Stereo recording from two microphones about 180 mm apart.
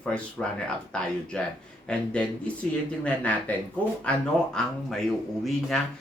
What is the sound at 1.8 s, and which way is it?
Speech, 5° left (ahead or behind).